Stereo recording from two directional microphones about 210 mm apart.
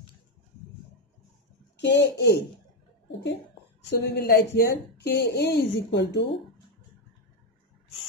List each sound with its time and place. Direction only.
1.8 s a woman's voice: 55° left (ahead or behind)
4.0 s a woman's voice: 50° left (ahead or behind)